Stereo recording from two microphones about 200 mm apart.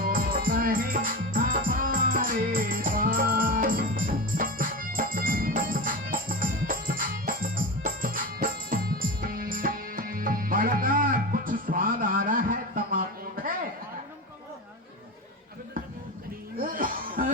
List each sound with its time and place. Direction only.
0.0 s music: 45° right (ahead or behind)
16.6 s chuckle: 45° right (ahead or behind)